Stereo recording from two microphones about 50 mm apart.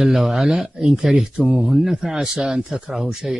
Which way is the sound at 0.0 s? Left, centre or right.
Centre.